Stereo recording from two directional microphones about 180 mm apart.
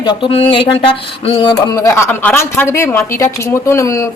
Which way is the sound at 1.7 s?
20° left (ahead or behind).